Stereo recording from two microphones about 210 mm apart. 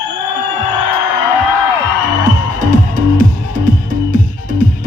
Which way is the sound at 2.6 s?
40° right (ahead or behind).